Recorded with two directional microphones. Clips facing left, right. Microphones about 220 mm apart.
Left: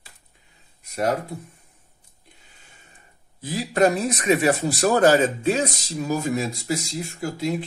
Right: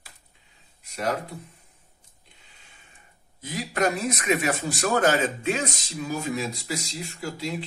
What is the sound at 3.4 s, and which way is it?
A man's voice, 30° left (ahead or behind).